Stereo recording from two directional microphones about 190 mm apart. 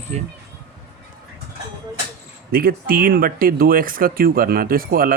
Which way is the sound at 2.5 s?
50° right (ahead or behind).